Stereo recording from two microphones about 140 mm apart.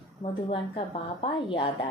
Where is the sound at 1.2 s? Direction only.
40° left (ahead or behind).